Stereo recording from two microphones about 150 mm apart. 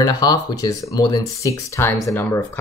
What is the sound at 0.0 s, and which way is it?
Speech, 25° left (ahead or behind).